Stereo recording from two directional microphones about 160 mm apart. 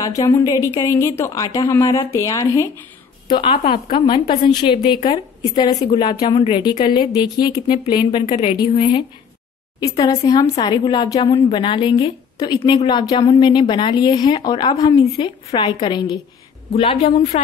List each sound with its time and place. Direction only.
0.0 s speech: 20° left (ahead or behind)
3.3 s a woman's voice: 30° left (ahead or behind)
15.1 s a woman's voice: 35° left (ahead or behind)